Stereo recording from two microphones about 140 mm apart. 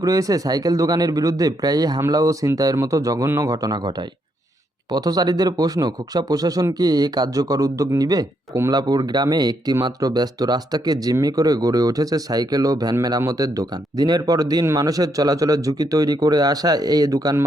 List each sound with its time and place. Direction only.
0.0 s speech: 25° right (ahead or behind)